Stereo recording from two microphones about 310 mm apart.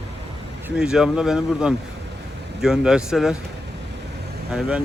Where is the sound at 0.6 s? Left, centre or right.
Centre.